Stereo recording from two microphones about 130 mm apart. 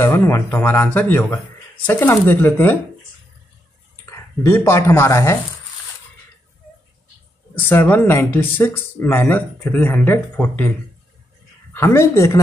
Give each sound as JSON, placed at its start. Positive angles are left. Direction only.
{"t": 0.0, "sound": "speech", "side_deg": 20}
{"t": 4.0, "sound": "speech", "side_deg": 20}
{"t": 7.6, "sound": "speech", "side_deg": 15}
{"t": 11.7, "sound": "a woman's voice", "side_deg": 20}